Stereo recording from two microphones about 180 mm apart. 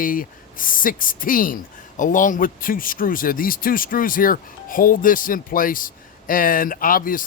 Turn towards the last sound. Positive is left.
turn(degrees=50)  # may be behind; listen again after turning